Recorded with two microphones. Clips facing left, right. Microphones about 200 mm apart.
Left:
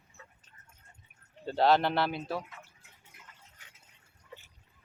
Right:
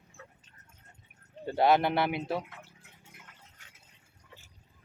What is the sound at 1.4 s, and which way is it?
Speech, 15° right (ahead or behind).